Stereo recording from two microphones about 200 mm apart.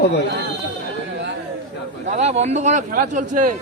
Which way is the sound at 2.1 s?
35° right (ahead or behind).